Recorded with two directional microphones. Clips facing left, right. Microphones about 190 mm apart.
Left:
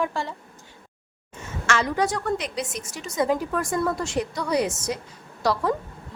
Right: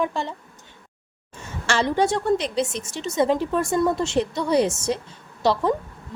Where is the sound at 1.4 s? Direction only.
30° right (ahead or behind).